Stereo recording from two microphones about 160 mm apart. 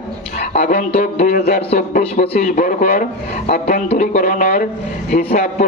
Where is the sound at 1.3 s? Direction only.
65° left (ahead or behind).